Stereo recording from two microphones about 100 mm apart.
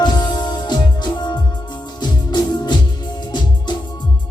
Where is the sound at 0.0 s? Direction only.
45° left (ahead or behind).